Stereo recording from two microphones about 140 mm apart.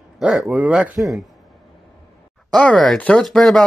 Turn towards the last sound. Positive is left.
turn(degrees=0)  # may be behind; listen again after turning